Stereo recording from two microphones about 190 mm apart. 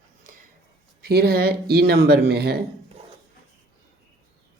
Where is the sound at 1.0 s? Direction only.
55° right (ahead or behind).